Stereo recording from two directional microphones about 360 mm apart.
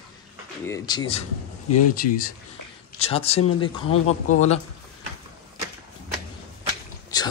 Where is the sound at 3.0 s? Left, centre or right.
Centre.